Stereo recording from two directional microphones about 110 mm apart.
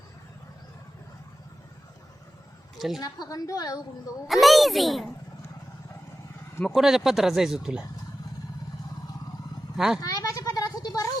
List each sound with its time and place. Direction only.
2.7 s a woman's voice: centre (ahead or behind)
3.0 s a woman's voice: 30° left (ahead or behind)
4.3 s speech: centre (ahead or behind)
6.7 s speech: centre (ahead or behind)
9.7 s speech: 5° right (ahead or behind)
10.0 s children playing: 35° left (ahead or behind)